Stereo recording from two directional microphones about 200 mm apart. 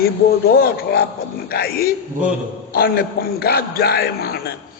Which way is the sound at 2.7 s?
50° left (ahead or behind).